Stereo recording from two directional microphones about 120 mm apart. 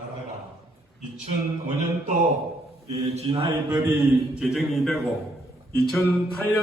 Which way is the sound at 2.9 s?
60° right (ahead or behind).